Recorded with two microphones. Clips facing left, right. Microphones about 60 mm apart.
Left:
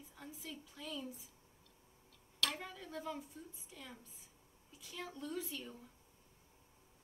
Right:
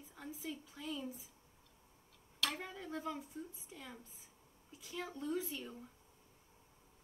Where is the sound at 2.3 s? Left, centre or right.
Centre.